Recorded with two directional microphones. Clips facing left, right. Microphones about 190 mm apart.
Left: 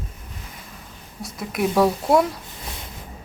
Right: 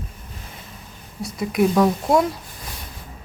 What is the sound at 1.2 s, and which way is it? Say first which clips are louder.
Speech: right 5 dB; centre (ahead or behind).